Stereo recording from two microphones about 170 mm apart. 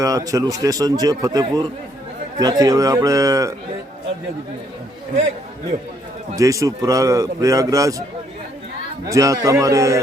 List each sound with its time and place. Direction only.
0.0 s a man's voice: 20° right (ahead or behind)
6.3 s a man's voice: 20° right (ahead or behind)
9.0 s a man's voice: 20° right (ahead or behind)